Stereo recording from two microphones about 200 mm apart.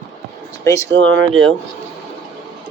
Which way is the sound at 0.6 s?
15° left (ahead or behind).